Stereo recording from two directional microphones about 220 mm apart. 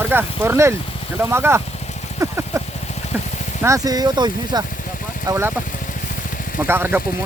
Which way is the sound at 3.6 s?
15° right (ahead or behind).